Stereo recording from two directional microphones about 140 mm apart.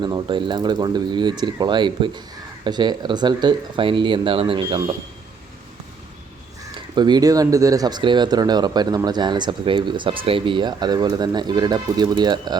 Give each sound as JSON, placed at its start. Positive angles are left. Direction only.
{"t": 0.0, "sound": "speech", "side_deg": -35}
{"t": 6.9, "sound": "speech", "side_deg": -30}